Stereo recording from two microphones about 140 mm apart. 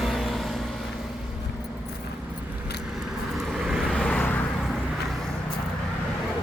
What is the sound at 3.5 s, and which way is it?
Vehicle, 5° right (ahead or behind).